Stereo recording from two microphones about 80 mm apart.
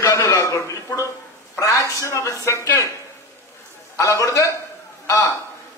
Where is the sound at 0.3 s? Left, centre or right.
Left.